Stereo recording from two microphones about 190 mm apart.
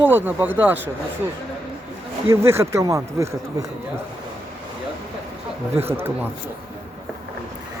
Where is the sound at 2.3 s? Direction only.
15° right (ahead or behind).